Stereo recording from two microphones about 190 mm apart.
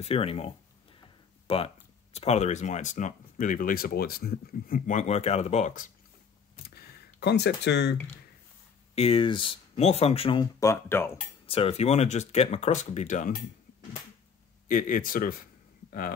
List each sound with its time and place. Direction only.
0.0 s speech: 30° left (ahead or behind)
1.5 s speech: 30° left (ahead or behind)
6.7 s a sound: 60° left (ahead or behind)
8.9 s speech: 30° left (ahead or behind)
10.6 s speech: 15° left (ahead or behind)
11.4 s speech: 30° left (ahead or behind)
14.7 s speech: 45° left (ahead or behind)